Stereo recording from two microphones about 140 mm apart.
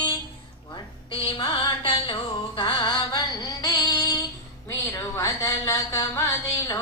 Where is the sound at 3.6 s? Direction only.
25° left (ahead or behind).